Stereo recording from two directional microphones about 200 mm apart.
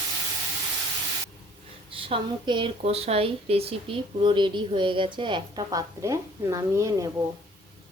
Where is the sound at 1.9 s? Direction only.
25° right (ahead or behind).